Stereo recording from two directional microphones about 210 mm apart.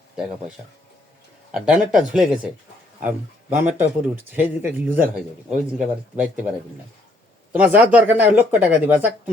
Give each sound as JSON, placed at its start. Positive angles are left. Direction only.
{"t": 0.2, "sound": "speech", "side_deg": -5}
{"t": 1.5, "sound": "speech", "side_deg": -5}
{"t": 1.9, "sound": "speech", "side_deg": -40}
{"t": 2.1, "sound": "speech", "side_deg": -5}
{"t": 7.5, "sound": "speech", "side_deg": -5}